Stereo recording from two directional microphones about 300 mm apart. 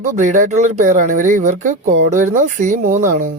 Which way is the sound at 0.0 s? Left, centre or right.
Right.